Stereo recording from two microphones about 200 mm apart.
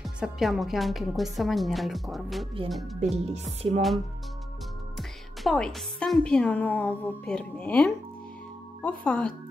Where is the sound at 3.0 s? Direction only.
35° right (ahead or behind).